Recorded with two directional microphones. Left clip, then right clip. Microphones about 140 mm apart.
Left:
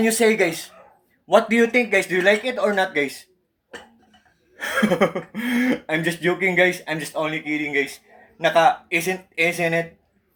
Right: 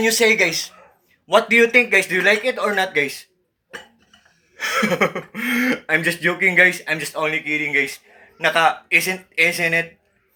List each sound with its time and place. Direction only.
0.0 s speech: 45° left (ahead or behind)
1.8 s speech: 20° left (ahead or behind)
4.5 s speech: 40° left (ahead or behind); by 9.8 s 25° left (ahead or behind)